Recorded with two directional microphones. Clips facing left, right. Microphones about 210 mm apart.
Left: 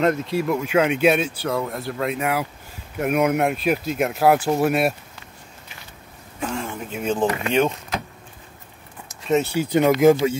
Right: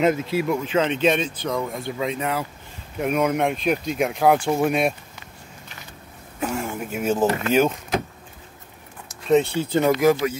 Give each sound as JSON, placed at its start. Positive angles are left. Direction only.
{"t": 0.0, "sound": "speech", "side_deg": 0}
{"t": 6.4, "sound": "speech", "side_deg": -10}
{"t": 9.3, "sound": "speech", "side_deg": 10}